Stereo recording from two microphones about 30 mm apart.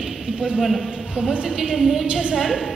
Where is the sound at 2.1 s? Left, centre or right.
Right.